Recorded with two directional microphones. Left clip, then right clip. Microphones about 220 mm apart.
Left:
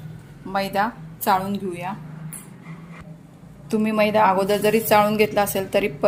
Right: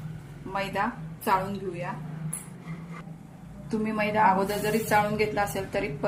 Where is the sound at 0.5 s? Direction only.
40° left (ahead or behind).